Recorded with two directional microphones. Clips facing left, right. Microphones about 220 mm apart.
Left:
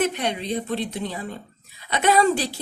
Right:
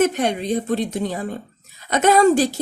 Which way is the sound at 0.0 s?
45° right (ahead or behind).